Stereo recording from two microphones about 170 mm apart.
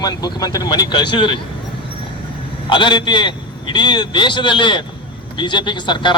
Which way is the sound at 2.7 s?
25° left (ahead or behind).